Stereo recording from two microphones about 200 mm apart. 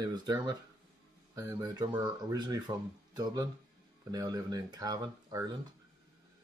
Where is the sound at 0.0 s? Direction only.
20° right (ahead or behind).